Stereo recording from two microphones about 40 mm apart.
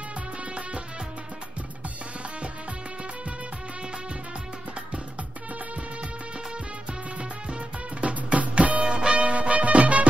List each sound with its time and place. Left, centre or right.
0.4 s music: right
7.2 s music: right